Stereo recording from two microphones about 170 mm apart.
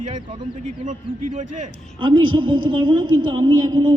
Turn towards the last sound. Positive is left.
turn(degrees=-25)  # may be behind; listen again after turning